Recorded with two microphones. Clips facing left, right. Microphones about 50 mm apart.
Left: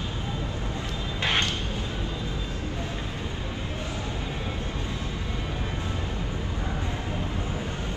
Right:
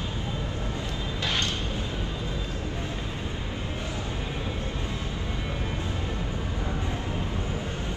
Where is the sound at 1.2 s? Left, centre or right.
Left.